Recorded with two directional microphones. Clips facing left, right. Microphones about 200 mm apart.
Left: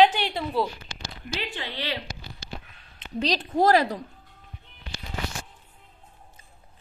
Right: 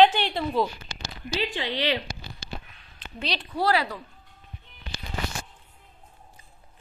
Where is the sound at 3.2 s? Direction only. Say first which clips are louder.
Left 5 dB; 45° left (ahead or behind).